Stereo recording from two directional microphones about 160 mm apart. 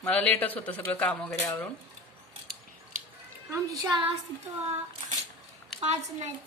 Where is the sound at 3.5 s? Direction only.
20° right (ahead or behind).